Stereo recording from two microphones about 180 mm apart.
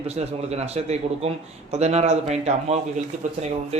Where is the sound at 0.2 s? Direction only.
35° right (ahead or behind).